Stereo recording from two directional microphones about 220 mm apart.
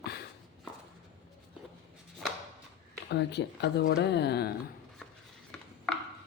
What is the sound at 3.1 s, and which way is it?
Speech, 50° left (ahead or behind).